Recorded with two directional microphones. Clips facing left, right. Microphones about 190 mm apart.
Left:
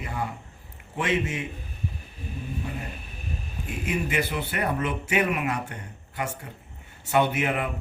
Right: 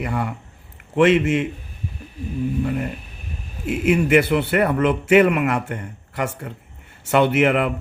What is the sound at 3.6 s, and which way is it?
Speech, 80° right.